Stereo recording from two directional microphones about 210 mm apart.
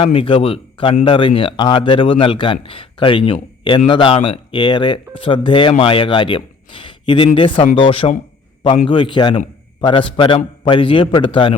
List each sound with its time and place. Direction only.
0.0 s speech: 25° left (ahead or behind)